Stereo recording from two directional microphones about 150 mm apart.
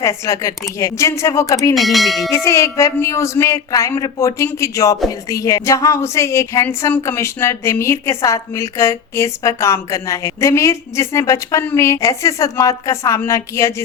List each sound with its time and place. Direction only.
0.0 s speech: 20° left (ahead or behind)
1.7 s speech: centre (ahead or behind)
2.3 s speech: 20° left (ahead or behind)